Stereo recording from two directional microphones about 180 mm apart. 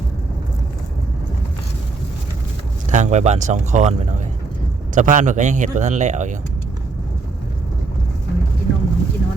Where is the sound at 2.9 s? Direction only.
40° right (ahead or behind).